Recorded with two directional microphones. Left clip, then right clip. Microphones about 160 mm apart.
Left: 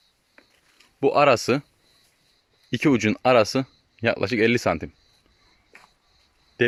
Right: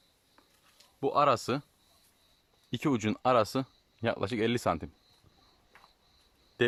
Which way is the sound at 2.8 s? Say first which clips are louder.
Left 9 dB; 15° left (ahead or behind).